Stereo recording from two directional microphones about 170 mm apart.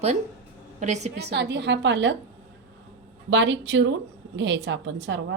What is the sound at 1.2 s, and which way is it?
Speech, 80° right.